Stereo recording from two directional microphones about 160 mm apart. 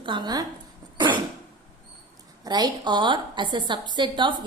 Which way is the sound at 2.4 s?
25° right (ahead or behind).